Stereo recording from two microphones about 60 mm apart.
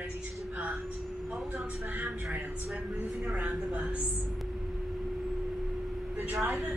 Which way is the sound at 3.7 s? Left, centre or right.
Centre.